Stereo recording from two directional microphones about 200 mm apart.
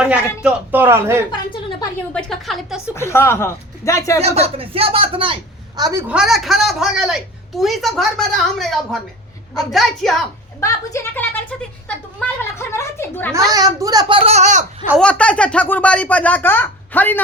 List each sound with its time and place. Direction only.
0.0 s a man's voice: 5° right (ahead or behind)
2.1 s a woman's voice: centre (ahead or behind)
2.9 s speech: 15° left (ahead or behind)
4.4 s a woman's voice: 30° right (ahead or behind); by 10.2 s centre (ahead or behind)
10.6 s speech: 15° left (ahead or behind)
12.4 s a woman's voice: 15° left (ahead or behind)
13.3 s a child's voice: 15° right (ahead or behind); by 14.6 s 35° right (ahead or behind)
14.8 s speech: 5° left (ahead or behind)